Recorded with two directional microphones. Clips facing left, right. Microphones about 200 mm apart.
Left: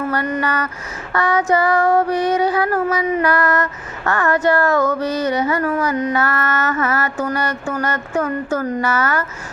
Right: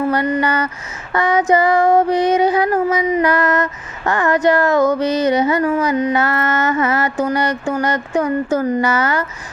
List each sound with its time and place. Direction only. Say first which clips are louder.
0.3 s female singing: right 3 dB; 15° right (ahead or behind)